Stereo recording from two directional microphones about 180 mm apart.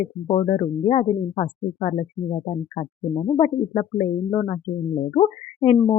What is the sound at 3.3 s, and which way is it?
Speech, 30° left (ahead or behind).